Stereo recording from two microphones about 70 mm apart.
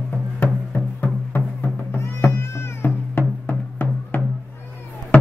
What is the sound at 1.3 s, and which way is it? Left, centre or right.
Cat, left.